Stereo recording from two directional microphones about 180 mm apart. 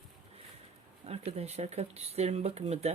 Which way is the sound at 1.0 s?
35° right (ahead or behind).